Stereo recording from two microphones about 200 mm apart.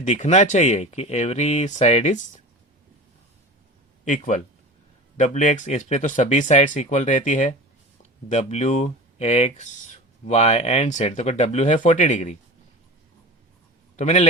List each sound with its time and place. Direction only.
0.0 s speech: 35° left (ahead or behind)
4.0 s speech: 40° left (ahead or behind)
13.9 s a man's voice: 35° left (ahead or behind)